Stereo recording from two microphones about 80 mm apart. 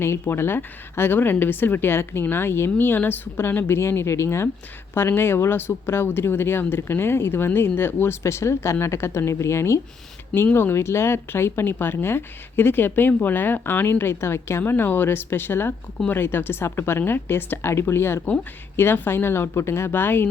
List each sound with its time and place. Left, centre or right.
0.0 s speech: left